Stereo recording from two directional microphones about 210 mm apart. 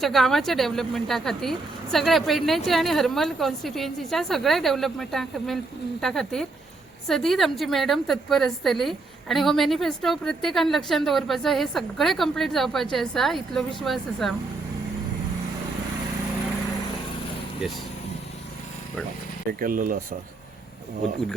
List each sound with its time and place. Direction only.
0.0 s a woman's voice: centre (ahead or behind)
19.5 s speech: 45° right (ahead or behind)